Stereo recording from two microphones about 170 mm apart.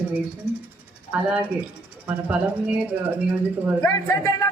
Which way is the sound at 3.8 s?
20° left (ahead or behind).